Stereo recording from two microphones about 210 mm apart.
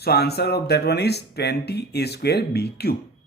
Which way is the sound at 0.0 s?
50° left (ahead or behind).